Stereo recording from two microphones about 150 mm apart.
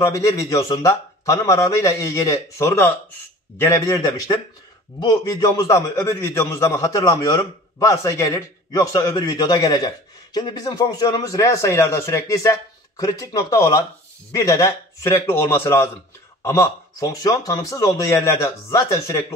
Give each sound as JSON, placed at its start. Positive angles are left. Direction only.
{"t": 0.0, "sound": "a man's voice", "side_deg": 20}